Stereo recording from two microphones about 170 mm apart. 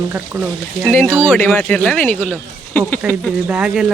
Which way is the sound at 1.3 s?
10° left (ahead or behind).